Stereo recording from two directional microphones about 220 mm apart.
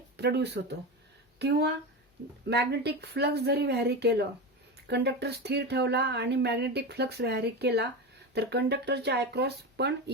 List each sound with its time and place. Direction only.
0.2 s speech: 50° right (ahead or behind)